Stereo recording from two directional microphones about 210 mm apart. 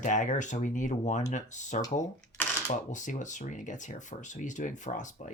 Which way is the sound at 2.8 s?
35° left (ahead or behind).